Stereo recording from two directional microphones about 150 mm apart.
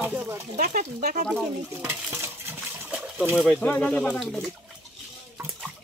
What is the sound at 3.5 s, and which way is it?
Speech, 5° left (ahead or behind).